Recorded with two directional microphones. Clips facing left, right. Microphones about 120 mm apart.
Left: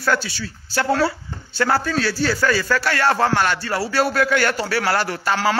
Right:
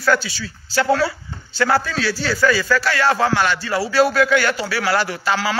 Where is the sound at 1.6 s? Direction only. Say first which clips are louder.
Right 1 dB; 40° left (ahead or behind).